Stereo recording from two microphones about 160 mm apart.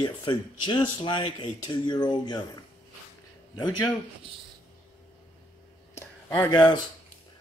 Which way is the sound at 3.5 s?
25° left (ahead or behind).